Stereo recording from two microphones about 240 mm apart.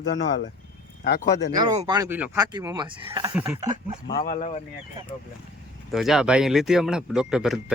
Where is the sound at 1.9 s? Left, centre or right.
Centre.